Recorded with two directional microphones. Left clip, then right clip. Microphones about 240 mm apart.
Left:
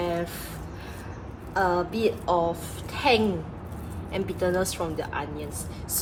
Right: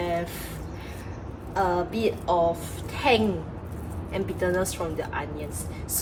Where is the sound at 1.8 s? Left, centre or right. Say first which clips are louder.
Left 1 dB; centre.